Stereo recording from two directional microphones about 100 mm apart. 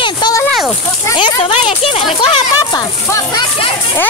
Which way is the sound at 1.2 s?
65° left (ahead or behind).